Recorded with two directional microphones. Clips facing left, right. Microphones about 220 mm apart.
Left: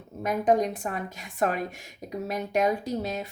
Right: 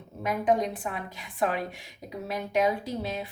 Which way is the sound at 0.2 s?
45° left (ahead or behind).